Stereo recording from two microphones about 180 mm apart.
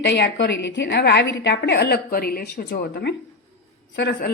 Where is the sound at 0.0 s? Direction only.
80° left.